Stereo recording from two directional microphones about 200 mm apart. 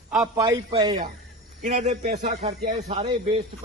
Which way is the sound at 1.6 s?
35° right (ahead or behind).